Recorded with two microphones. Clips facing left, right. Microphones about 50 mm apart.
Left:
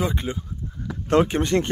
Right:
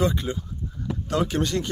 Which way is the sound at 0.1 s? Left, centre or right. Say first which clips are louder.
Even; left.